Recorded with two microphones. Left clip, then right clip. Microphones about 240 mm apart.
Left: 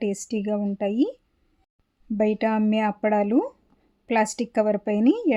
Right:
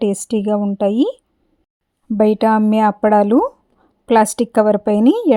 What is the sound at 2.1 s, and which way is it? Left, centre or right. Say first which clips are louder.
Speech: right 9 dB; right.